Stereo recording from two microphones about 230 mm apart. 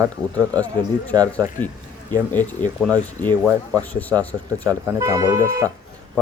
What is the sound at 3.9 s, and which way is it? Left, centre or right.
Speech, centre.